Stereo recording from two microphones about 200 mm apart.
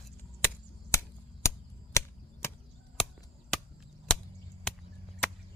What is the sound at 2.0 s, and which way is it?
Chop, 15° left (ahead or behind).